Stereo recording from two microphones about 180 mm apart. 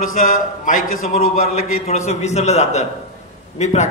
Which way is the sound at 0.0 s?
50° left (ahead or behind).